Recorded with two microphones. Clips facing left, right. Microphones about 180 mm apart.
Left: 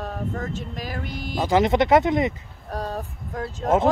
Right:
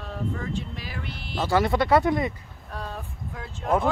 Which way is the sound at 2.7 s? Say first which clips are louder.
Left 6 dB; 40° left (ahead or behind).